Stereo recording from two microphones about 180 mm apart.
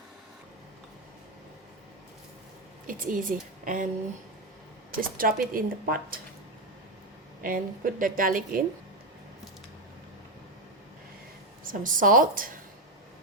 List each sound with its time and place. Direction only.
2.8 s speech: 50° right (ahead or behind)
4.9 s speech: 50° right (ahead or behind)
7.4 s speech: 50° right (ahead or behind)
11.6 s speech: 50° right (ahead or behind)